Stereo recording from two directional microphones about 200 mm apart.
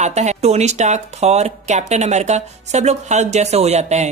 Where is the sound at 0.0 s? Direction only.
35° right (ahead or behind).